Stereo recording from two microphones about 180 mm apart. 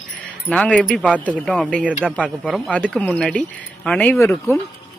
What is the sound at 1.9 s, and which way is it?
Speech, 10° right (ahead or behind).